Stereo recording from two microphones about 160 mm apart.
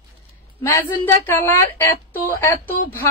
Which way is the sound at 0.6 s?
15° left (ahead or behind).